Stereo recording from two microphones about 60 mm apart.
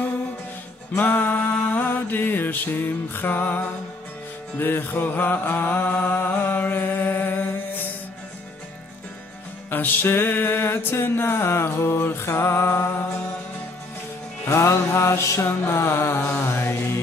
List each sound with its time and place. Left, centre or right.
0.9 s mantra: left
4.6 s music: left
6.4 s mantra: left
9.7 s music: left
14.5 s mantra: left
15.4 s music: left